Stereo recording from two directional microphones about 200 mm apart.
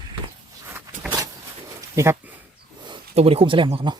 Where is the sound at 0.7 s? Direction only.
15° right (ahead or behind).